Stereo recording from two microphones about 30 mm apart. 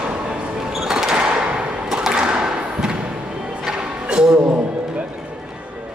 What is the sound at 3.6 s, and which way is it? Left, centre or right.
Music, right.